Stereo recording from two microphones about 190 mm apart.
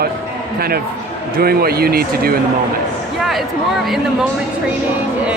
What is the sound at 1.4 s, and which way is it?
Speech, 55° right (ahead or behind).